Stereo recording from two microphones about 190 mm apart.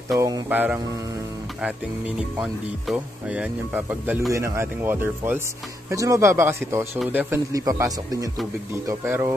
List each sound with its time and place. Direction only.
0.2 s speech: 15° right (ahead or behind)